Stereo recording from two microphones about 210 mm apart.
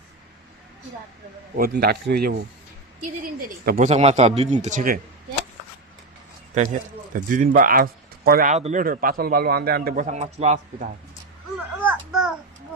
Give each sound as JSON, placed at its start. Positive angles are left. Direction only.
{"t": 1.5, "sound": "a man's voice", "side_deg": -45}
{"t": 3.7, "sound": "speech", "side_deg": -35}
{"t": 6.5, "sound": "speech", "side_deg": -35}
{"t": 11.8, "sound": "a sound", "side_deg": -5}